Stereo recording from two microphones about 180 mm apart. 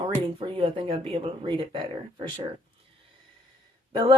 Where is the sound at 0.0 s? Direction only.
30° right (ahead or behind).